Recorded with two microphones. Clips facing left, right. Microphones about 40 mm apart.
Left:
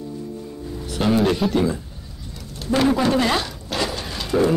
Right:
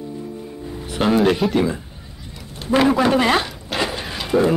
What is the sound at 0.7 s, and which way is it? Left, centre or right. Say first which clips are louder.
Music: right 2 dB; right.